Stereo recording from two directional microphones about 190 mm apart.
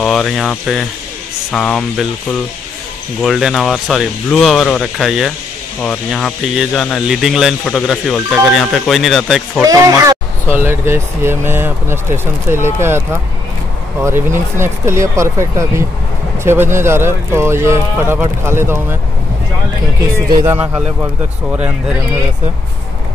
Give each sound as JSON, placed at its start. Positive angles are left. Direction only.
{"t": 0.0, "sound": "speech", "side_deg": 0}
{"t": 3.2, "sound": "speech", "side_deg": 0}
{"t": 9.6, "sound": "speech", "side_deg": -15}
{"t": 14.0, "sound": "speech", "side_deg": -15}
{"t": 20.2, "sound": "a man's voice", "side_deg": -20}
{"t": 20.5, "sound": "speech", "side_deg": -5}